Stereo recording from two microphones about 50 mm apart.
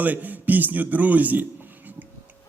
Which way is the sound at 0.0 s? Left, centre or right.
Right.